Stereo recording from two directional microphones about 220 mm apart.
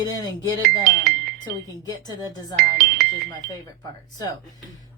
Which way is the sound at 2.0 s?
20° left (ahead or behind).